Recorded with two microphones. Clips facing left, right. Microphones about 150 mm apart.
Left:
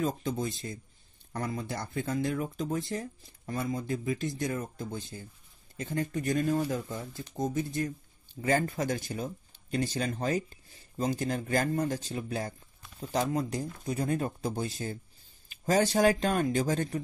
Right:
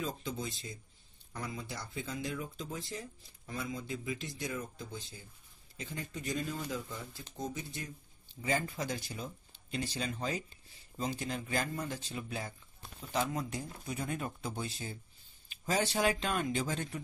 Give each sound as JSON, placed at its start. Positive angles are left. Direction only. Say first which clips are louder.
{"t": 0.0, "sound": "speech", "louder": "left 7 dB", "side_deg": 50}